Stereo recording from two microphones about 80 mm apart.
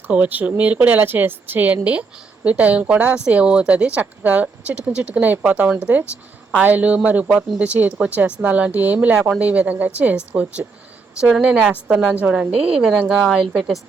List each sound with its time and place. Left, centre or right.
0.1 s speech: right